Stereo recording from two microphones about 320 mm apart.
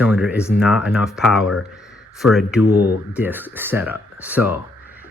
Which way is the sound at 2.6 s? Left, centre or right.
Left.